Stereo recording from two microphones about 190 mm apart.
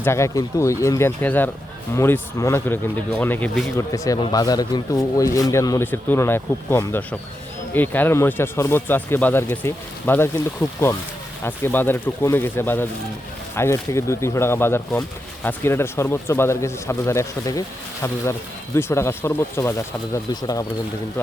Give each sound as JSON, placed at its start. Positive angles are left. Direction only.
{"t": 0.0, "sound": "speech", "side_deg": 15}